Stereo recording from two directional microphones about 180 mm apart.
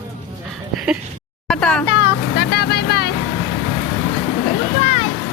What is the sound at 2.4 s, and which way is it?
Vehicle, 60° left (ahead or behind).